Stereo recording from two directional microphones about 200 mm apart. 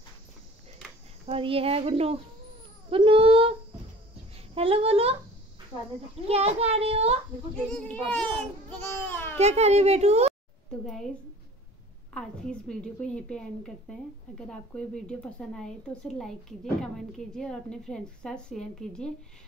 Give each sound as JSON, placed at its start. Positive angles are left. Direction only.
{"t": 1.2, "sound": "speech", "side_deg": -30}
{"t": 6.2, "sound": "a woman's voice", "side_deg": -30}
{"t": 7.7, "sound": "a child's voice", "side_deg": 5}
{"t": 9.4, "sound": "a woman's voice", "side_deg": -35}
{"t": 10.7, "sound": "a woman's voice", "side_deg": 0}
{"t": 12.1, "sound": "a woman's voice", "side_deg": 5}